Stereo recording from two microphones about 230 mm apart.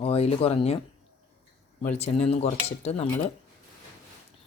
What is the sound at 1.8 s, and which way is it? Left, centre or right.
Speech, left.